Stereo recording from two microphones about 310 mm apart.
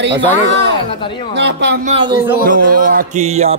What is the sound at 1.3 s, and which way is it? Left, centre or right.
Speech, right.